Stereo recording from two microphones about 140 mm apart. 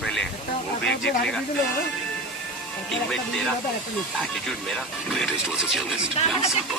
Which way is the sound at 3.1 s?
5° left (ahead or behind).